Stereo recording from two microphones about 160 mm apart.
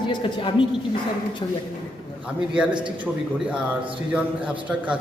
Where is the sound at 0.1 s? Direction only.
30° left (ahead or behind).